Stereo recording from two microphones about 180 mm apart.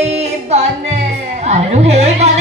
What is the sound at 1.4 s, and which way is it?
Speech, 35° right (ahead or behind).